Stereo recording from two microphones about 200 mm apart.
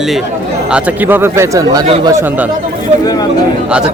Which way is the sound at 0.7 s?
10° right (ahead or behind).